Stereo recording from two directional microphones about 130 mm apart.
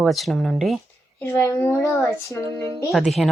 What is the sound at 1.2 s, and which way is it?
A woman's voice, 15° left (ahead or behind).